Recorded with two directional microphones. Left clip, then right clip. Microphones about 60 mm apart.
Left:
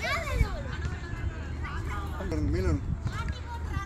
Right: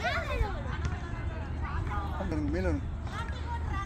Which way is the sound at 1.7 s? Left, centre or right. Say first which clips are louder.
Right 1 dB; centre.